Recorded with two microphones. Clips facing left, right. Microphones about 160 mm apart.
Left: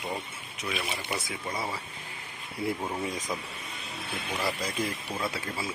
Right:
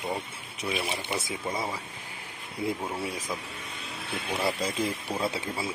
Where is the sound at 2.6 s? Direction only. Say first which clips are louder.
Even; 10° right (ahead or behind).